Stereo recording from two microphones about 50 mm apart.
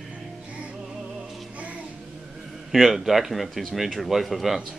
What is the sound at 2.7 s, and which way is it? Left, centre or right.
Speech, centre.